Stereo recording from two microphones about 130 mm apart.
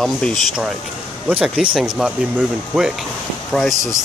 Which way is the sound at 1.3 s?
10° right (ahead or behind).